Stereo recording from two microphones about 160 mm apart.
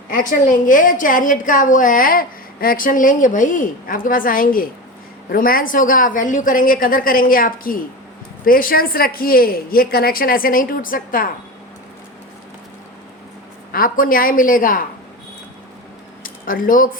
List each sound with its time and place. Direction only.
0.1 s a woman's voice: 55° left (ahead or behind)
13.7 s a woman's voice: 65° left (ahead or behind)
16.2 s speech: 60° left (ahead or behind)